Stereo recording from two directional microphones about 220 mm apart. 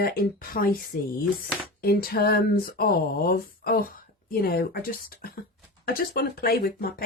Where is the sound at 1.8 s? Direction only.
45° left (ahead or behind).